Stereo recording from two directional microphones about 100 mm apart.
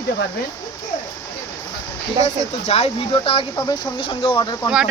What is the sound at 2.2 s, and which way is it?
Speech, 90° left.